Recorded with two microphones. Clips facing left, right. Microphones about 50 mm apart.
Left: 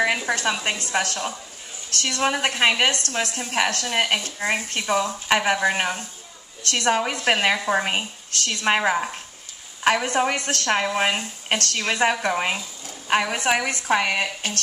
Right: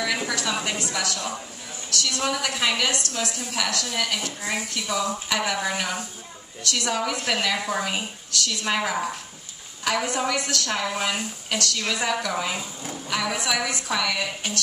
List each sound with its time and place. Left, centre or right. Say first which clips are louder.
0.3 s a woman's voice: left 3 dB; left